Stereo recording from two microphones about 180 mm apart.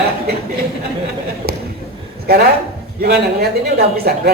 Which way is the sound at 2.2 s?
60° right (ahead or behind).